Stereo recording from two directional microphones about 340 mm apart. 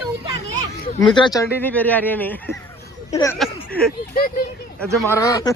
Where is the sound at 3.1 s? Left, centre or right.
Centre.